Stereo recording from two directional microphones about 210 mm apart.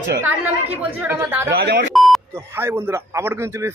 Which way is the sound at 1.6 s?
50° right (ahead or behind).